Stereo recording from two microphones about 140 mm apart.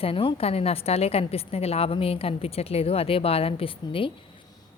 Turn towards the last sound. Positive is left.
turn(degrees=40)  # may be behind; listen again after turning